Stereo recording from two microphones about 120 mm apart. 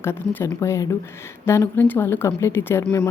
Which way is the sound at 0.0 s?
20° left (ahead or behind).